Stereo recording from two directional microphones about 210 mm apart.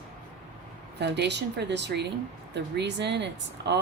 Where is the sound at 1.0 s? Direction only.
55° right (ahead or behind).